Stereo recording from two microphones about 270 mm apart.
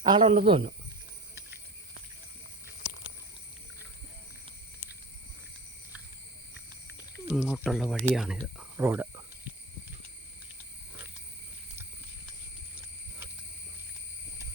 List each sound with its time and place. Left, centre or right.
0.0 s speech: centre
7.3 s speech: centre